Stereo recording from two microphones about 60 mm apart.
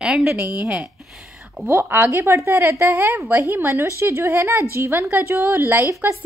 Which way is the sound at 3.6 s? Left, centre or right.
Right.